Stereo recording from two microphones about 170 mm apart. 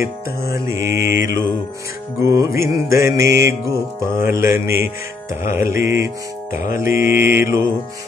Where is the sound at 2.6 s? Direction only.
20° right (ahead or behind).